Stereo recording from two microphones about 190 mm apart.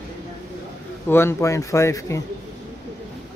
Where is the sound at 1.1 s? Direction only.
15° left (ahead or behind).